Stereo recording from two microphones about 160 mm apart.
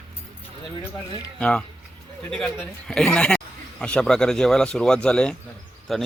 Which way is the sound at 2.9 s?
5° left (ahead or behind).